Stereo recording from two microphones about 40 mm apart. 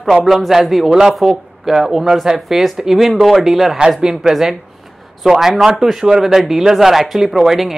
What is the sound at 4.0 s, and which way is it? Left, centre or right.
Speech, centre.